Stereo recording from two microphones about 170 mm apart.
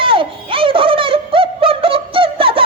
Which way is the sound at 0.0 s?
30° right (ahead or behind).